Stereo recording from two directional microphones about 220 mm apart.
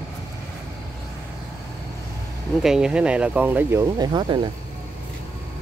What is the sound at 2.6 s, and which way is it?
Speech, 5° right (ahead or behind).